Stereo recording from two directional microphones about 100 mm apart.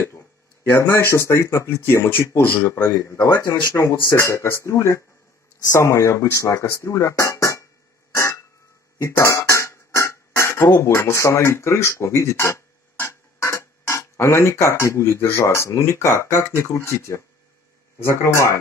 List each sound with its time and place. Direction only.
0.7 s speech: 25° left (ahead or behind)
8.2 s a sound: 30° left (ahead or behind)
8.9 s speech: 30° left (ahead or behind)
18.2 s speech: 30° left (ahead or behind)